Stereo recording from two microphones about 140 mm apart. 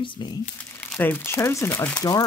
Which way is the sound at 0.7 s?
15° left (ahead or behind).